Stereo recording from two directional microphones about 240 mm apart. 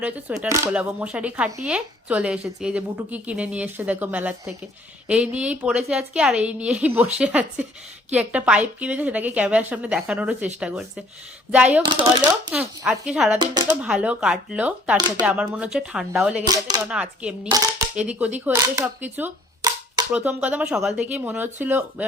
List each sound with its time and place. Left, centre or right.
0.0 s speech: centre
13.4 s speech: centre
13.7 s speech: centre
14.9 s speech: centre
15.3 s speech: centre